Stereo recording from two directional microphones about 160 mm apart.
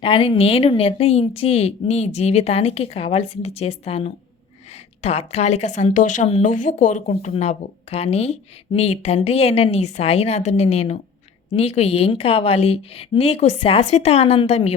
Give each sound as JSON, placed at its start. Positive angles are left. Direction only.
{"t": 0.0, "sound": "speech", "side_deg": 35}